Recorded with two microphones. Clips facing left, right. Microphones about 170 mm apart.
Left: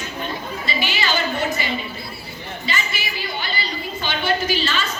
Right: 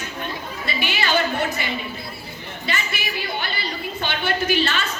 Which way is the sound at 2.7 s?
60° right (ahead or behind).